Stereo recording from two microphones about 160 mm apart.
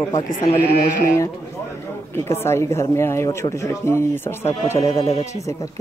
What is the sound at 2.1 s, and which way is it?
A woman's voice, 15° left (ahead or behind).